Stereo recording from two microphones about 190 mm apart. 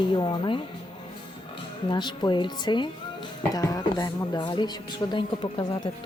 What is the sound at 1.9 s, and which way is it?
Speech, 25° left (ahead or behind).